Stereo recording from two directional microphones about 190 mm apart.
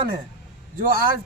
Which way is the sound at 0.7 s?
50° right (ahead or behind).